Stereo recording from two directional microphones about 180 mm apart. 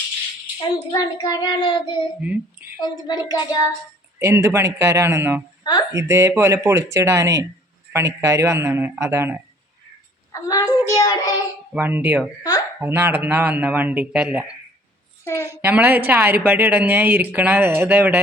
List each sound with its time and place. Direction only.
0.9 s a child's voice: 20° left (ahead or behind)
2.2 s speech: 10° right (ahead or behind)
2.8 s a child's voice: 20° left (ahead or behind)
4.2 s speech: 15° right (ahead or behind)
10.3 s a child's voice: 20° left (ahead or behind)
11.7 s speech: 10° right (ahead or behind)
12.4 s a child's voice: 20° left (ahead or behind)
12.8 s speech: 10° right (ahead or behind)
15.2 s a child's voice: 15° left (ahead or behind)
15.6 s speech: 10° right (ahead or behind)